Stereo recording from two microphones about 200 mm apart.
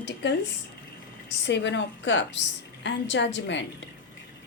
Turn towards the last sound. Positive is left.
turn(degrees=65)  # may be behind; listen again after turning